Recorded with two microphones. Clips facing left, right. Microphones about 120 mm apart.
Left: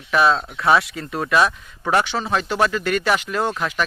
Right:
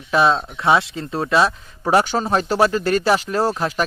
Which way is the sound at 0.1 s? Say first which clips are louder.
Right 1 dB; 25° right (ahead or behind).